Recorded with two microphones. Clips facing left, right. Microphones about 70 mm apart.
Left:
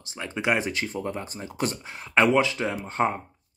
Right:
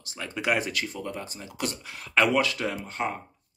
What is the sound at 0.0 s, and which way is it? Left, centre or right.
Speech, left.